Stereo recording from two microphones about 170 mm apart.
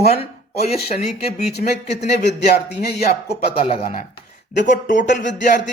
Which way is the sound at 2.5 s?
70° left (ahead or behind).